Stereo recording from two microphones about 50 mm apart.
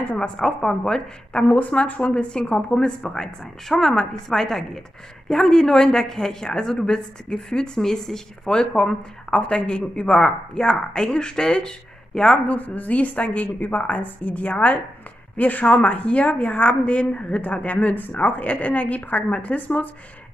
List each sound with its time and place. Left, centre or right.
0.0 s speech: left
0.4 s a woman's voice: centre
1.5 s a woman's voice: left
12.4 s a woman's voice: left